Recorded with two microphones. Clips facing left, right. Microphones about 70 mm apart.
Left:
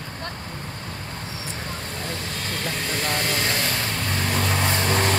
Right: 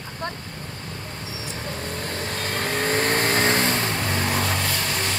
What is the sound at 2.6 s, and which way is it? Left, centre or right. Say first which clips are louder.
Vehicle: right 6 dB; right.